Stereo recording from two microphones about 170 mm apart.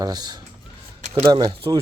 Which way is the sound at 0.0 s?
25° right (ahead or behind).